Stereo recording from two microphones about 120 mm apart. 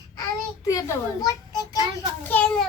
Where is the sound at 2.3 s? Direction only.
15° left (ahead or behind).